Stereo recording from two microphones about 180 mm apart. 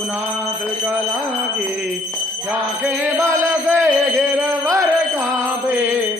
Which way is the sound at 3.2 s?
15° right (ahead or behind).